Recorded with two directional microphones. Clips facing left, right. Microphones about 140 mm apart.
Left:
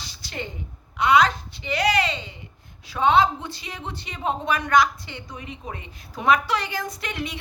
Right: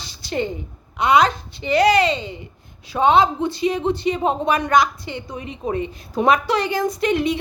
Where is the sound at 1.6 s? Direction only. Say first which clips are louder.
Right 7 dB; 30° right (ahead or behind).